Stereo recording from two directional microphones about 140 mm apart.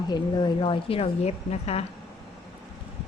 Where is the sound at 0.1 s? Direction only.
35° left (ahead or behind); by 1.8 s 50° left (ahead or behind).